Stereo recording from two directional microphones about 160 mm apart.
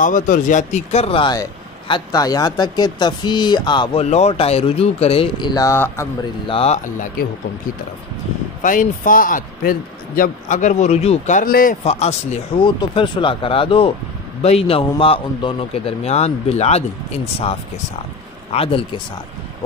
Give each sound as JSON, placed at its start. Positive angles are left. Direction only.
{"t": 0.0, "sound": "speech", "side_deg": 55}
{"t": 4.0, "sound": "a man's voice", "side_deg": 40}
{"t": 6.4, "sound": "a man's voice", "side_deg": 35}
{"t": 8.6, "sound": "a man's voice", "side_deg": 55}
{"t": 11.8, "sound": "speech", "side_deg": 45}
{"t": 12.6, "sound": "a man's voice", "side_deg": 30}
{"t": 18.5, "sound": "a man's voice", "side_deg": 35}